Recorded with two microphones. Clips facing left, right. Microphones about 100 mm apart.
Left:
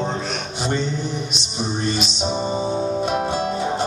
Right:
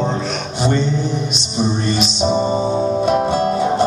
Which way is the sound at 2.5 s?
25° right (ahead or behind).